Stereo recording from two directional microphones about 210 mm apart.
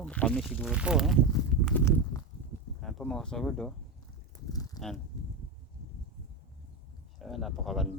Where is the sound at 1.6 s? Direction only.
10° left (ahead or behind).